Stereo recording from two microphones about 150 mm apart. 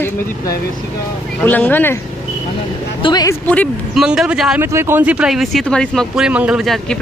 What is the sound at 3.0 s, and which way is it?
Speech, 30° left (ahead or behind).